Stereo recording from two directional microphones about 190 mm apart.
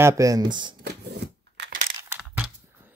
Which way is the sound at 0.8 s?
60° right (ahead or behind).